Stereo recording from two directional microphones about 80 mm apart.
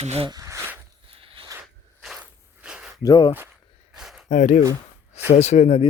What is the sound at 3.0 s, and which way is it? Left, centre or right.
Speech, left.